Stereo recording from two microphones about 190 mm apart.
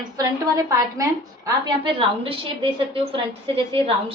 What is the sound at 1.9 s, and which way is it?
Speech, 30° right (ahead or behind).